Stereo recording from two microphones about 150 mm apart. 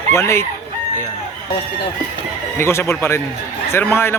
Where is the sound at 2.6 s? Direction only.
15° left (ahead or behind).